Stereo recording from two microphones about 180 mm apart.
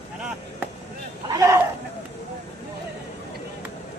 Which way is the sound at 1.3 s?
15° right (ahead or behind).